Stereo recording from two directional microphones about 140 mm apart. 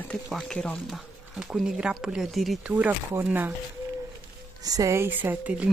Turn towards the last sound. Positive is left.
turn(degrees=-10)  # may be behind; listen again after turning